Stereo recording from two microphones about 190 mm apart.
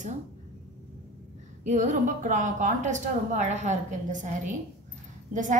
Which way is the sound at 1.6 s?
40° right (ahead or behind).